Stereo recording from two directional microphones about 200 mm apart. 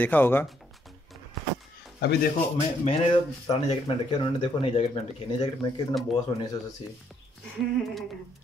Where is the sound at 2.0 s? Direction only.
55° left (ahead or behind).